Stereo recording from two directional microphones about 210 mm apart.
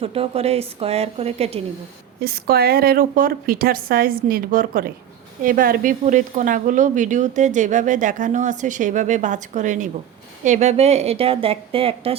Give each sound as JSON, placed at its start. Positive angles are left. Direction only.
{"t": 0.0, "sound": "a woman's voice", "side_deg": -25}
{"t": 2.2, "sound": "a woman's voice", "side_deg": -45}